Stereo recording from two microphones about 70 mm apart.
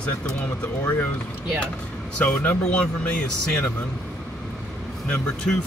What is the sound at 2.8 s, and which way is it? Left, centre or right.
Speech, centre.